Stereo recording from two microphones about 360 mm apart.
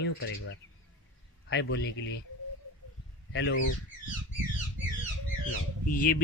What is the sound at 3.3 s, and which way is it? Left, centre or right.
Speech, left.